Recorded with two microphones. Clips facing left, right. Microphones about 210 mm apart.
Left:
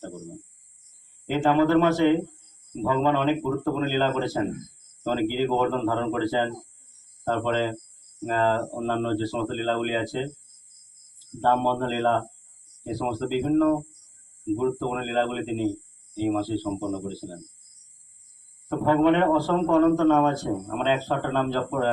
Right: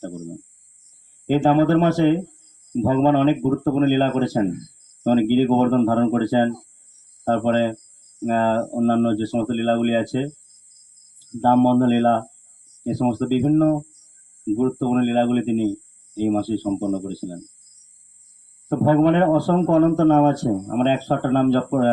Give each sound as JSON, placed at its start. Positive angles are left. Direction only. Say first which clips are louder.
{"t": 1.3, "sound": "a man's voice", "louder": "right 4 dB", "side_deg": -40}
{"t": 11.4, "sound": "a man's voice", "louder": "right 9 dB", "side_deg": -40}
{"t": 18.7, "sound": "a man's voice", "louder": "right 4 dB", "side_deg": -40}